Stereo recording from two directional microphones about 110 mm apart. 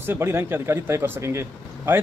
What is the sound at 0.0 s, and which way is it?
Speech, 20° right (ahead or behind).